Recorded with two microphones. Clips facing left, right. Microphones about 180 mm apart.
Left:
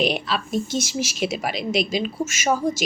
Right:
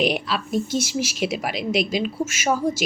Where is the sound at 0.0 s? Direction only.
10° right (ahead or behind).